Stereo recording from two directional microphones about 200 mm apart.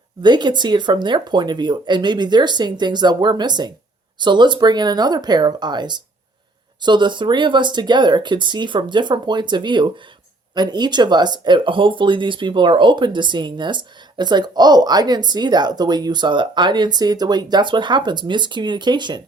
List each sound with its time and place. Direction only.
0.2 s speech: 20° right (ahead or behind)